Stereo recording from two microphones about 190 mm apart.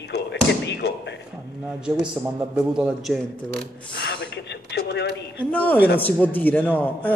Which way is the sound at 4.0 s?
70° left (ahead or behind).